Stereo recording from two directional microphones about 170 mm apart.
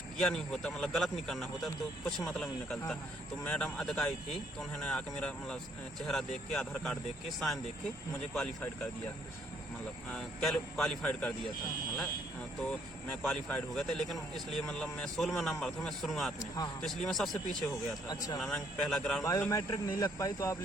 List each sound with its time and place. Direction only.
0.2 s speech: centre (ahead or behind)
10.1 s speech: 5° left (ahead or behind)
12.6 s speech: 5° left (ahead or behind)
19.2 s speech: 20° left (ahead or behind)